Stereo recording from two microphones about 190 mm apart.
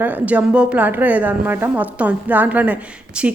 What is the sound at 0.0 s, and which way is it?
Speech, 10° right (ahead or behind).